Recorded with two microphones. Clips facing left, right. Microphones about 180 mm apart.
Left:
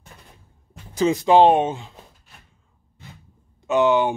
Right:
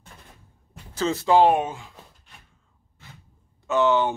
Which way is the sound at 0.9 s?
15° left (ahead or behind).